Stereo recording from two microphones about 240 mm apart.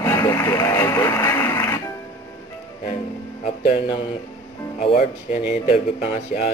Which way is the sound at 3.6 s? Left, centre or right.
Left.